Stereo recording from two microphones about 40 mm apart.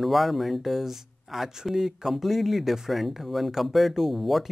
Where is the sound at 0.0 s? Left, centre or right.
Centre.